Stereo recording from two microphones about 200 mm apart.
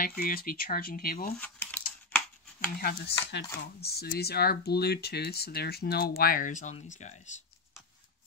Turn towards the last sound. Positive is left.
turn(degrees=35)  # may be behind; listen again after turning